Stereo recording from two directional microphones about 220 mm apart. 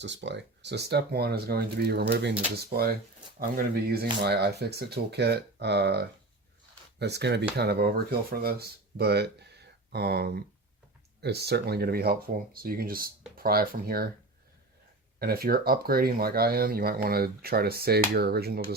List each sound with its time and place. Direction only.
0.0 s speech: 55° right (ahead or behind)
15.2 s speech: 45° right (ahead or behind)